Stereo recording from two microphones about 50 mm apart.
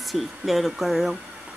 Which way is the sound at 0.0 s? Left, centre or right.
Centre.